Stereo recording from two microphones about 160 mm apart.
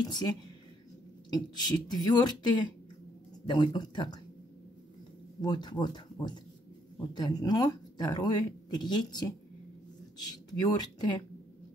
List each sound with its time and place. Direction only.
0.1 s speech: 25° left (ahead or behind)
5.4 s speech: 25° left (ahead or behind)